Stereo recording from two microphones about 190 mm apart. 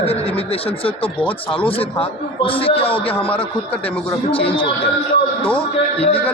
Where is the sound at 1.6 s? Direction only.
30° left (ahead or behind).